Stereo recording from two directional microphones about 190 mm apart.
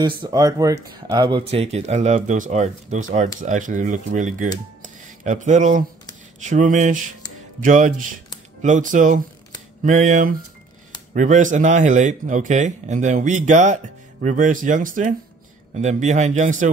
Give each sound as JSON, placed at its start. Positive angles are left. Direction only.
{"t": 0.2, "sound": "speech", "side_deg": -20}